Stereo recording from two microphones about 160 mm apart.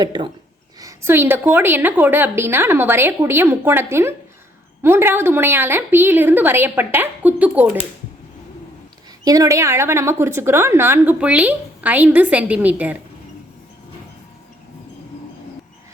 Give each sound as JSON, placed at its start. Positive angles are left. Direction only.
{"t": 0.0, "sound": "a woman's voice", "side_deg": -25}
{"t": 9.2, "sound": "a woman's voice", "side_deg": -20}